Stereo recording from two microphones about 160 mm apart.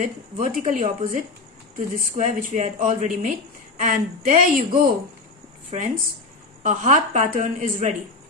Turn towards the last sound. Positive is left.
turn(degrees=-55)  # may be behind; listen again after turning